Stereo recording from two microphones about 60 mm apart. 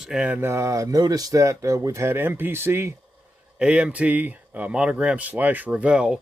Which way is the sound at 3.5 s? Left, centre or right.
Centre.